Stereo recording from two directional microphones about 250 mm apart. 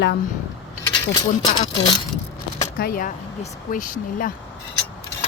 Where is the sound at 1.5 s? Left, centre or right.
Centre.